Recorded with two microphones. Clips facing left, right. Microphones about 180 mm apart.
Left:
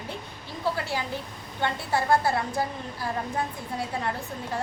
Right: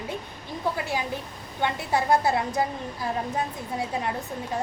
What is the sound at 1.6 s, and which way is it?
A woman's voice, 20° right (ahead or behind).